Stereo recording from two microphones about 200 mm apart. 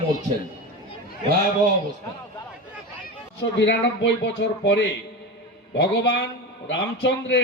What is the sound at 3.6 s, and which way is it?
A man's voice, 60° left (ahead or behind).